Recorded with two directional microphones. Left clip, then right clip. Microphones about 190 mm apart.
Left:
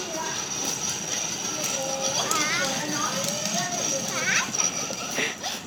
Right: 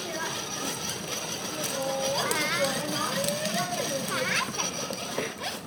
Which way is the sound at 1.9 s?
20° right (ahead or behind).